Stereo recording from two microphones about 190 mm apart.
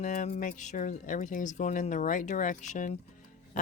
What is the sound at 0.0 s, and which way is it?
Speech, 40° left (ahead or behind).